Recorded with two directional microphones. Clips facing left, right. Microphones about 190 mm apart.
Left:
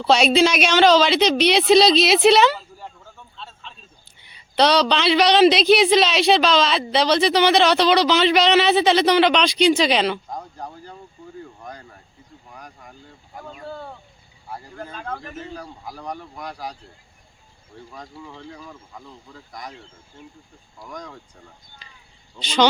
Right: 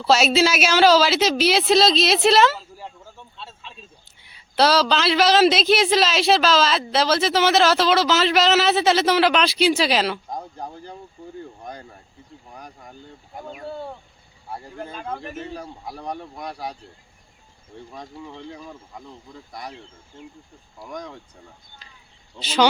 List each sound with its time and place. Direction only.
0.0 s speech: 5° right (ahead or behind)
4.2 s speech: 5° right (ahead or behind)
10.3 s a sound: 20° right (ahead or behind)
13.3 s a sound: 20° right (ahead or behind)
14.9 s speech: 10° right (ahead or behind)
15.4 s speech: 25° right (ahead or behind)
17.9 s speech: 25° right (ahead or behind)
20.1 s speech: 20° right (ahead or behind)
22.4 s speech: 5° right (ahead or behind)